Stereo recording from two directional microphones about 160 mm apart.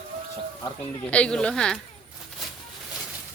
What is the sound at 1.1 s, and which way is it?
Speech, 5° left (ahead or behind).